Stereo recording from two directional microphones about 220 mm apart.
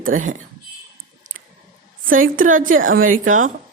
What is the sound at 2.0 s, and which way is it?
A woman's voice, 40° right (ahead or behind).